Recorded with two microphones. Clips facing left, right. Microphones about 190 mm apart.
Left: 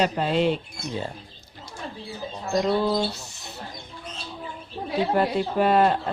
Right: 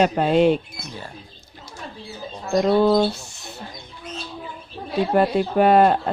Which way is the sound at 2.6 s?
50° right (ahead or behind).